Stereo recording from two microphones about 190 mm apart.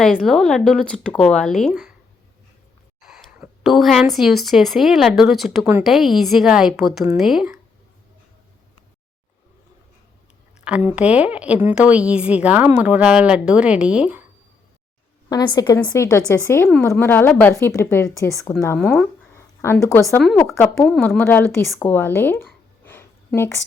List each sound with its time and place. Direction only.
0.0 s speech: 5° left (ahead or behind)
3.0 s speech: centre (ahead or behind)
10.6 s speech: 5° right (ahead or behind)
15.3 s a woman's voice: 20° left (ahead or behind)
18.8 s speech: centre (ahead or behind)
19.3 s speech: 15° left (ahead or behind)
20.8 s speech: centre (ahead or behind)